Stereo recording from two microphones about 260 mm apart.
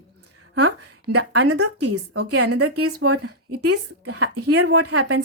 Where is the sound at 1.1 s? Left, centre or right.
Right.